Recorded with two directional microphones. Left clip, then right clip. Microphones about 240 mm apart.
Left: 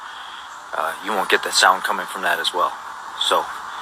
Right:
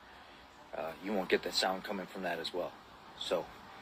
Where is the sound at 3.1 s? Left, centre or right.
Centre.